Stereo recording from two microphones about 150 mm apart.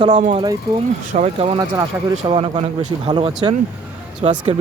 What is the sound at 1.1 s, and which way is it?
Speech, 50° right (ahead or behind).